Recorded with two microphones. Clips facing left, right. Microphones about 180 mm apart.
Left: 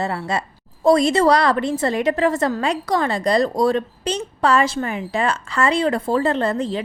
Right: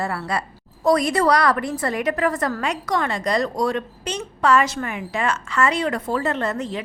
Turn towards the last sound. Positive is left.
turn(degrees=30)  # may be behind; listen again after turning